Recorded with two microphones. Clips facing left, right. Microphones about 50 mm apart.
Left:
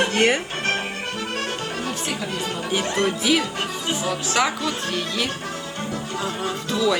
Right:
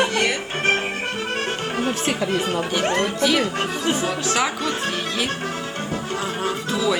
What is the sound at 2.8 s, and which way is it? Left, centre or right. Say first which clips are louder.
Speech: right 2 dB; right.